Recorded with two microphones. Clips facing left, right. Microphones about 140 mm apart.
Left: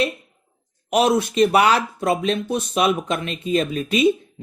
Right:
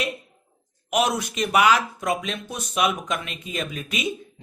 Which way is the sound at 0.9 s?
30° left (ahead or behind).